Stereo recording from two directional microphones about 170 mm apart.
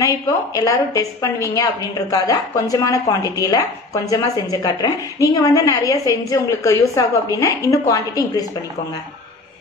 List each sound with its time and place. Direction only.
0.6 s a woman's voice: 20° left (ahead or behind)